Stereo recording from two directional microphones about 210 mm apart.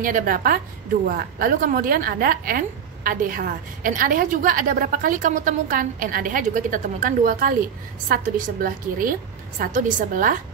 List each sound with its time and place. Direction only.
0.0 s a woman's voice: 40° right (ahead or behind)